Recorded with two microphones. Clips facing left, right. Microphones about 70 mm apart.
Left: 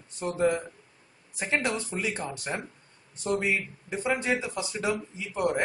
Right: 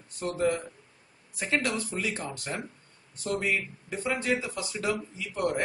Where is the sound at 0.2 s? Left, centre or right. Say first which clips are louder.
Left 2 dB; centre.